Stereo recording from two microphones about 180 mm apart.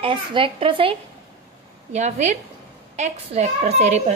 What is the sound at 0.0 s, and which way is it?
A woman's voice, 30° right (ahead or behind).